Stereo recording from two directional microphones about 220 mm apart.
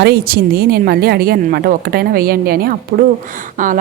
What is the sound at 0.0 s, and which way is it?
A woman's voice, 45° right (ahead or behind).